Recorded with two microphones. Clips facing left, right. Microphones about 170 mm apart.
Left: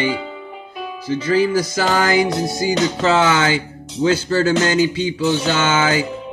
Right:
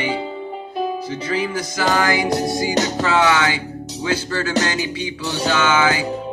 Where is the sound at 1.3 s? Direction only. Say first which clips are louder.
Left 7 dB; 30° left (ahead or behind).